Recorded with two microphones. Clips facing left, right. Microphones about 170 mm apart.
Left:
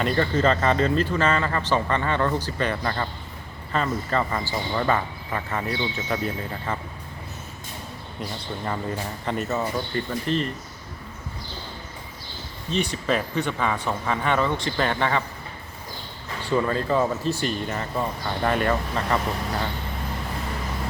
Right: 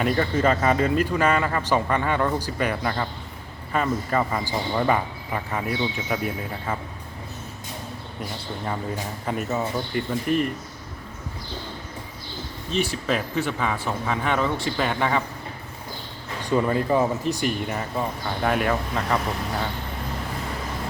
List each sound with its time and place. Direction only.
0.0 s speech: 10° right (ahead or behind)
8.6 s speech: 5° right (ahead or behind)
12.7 s speech: 5° right (ahead or behind)
16.5 s speech: 15° right (ahead or behind)